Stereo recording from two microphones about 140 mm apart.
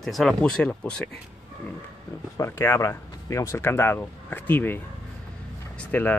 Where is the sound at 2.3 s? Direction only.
20° left (ahead or behind).